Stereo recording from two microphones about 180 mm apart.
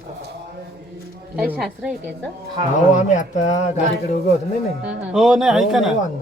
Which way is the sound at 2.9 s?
45° left (ahead or behind).